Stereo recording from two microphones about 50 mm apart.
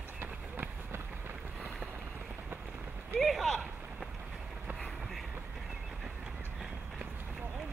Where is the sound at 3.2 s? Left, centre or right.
Centre.